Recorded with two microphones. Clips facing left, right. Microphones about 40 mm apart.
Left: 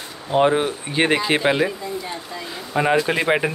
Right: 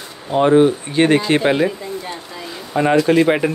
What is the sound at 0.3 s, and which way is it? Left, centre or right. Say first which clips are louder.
Speech: right 5 dB; centre.